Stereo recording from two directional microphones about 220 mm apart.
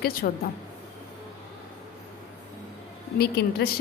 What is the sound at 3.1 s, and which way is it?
Speech, 45° left (ahead or behind).